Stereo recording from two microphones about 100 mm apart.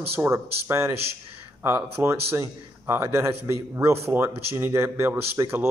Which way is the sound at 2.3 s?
25° right (ahead or behind).